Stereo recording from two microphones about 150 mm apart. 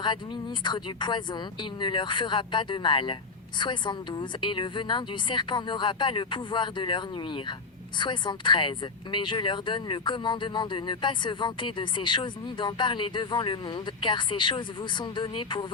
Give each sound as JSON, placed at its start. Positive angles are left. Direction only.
{"t": 0.6, "sound": "speech", "side_deg": 30}